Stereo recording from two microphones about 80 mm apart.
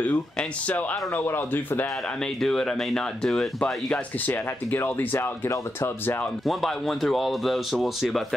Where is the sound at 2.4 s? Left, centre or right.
Centre.